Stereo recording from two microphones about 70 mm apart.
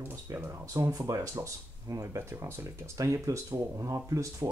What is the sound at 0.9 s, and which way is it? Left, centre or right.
Speech, right.